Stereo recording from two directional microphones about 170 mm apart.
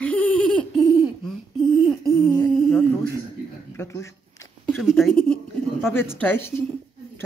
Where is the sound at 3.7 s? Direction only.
15° left (ahead or behind).